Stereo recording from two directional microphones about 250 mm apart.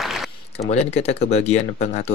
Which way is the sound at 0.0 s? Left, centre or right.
Centre.